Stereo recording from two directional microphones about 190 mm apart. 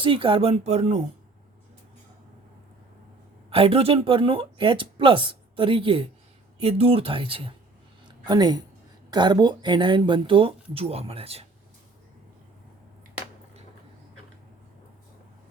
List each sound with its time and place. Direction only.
0.0 s speech: 25° right (ahead or behind)
3.5 s speech: 30° right (ahead or behind)
8.0 s a sound: 20° right (ahead or behind)
9.0 s speech: 20° right (ahead or behind)